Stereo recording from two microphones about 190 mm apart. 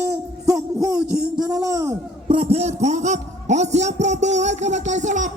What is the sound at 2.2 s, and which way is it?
A man's voice, 30° right (ahead or behind).